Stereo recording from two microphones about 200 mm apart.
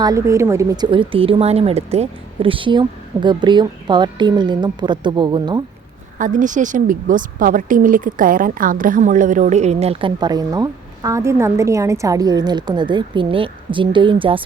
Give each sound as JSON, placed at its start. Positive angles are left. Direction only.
{"t": 0.0, "sound": "speech", "side_deg": -15}
{"t": 6.1, "sound": "speech", "side_deg": -40}